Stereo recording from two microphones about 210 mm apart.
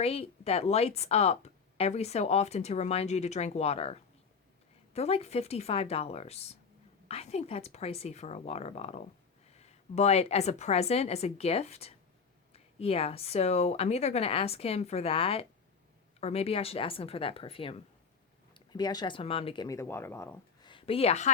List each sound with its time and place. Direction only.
0.0 s a woman's voice: 30° left (ahead or behind)
19.6 s speech: 15° left (ahead or behind); by 21.2 s 30° left (ahead or behind)